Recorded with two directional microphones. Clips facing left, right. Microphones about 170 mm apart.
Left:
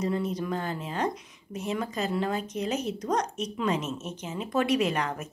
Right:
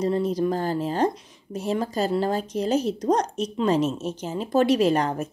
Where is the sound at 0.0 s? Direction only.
30° right (ahead or behind).